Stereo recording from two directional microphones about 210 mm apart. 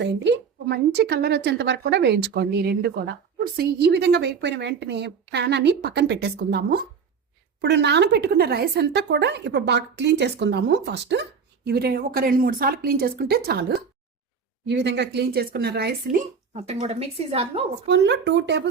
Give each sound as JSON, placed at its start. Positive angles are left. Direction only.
{"t": 0.0, "sound": "speech", "side_deg": -55}
{"t": 16.5, "sound": "a woman's voice", "side_deg": -30}
{"t": 17.8, "sound": "speech", "side_deg": -55}